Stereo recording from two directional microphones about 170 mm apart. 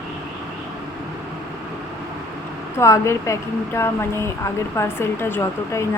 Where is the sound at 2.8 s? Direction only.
15° left (ahead or behind).